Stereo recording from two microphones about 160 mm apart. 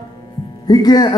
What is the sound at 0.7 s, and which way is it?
Speech, 25° left (ahead or behind).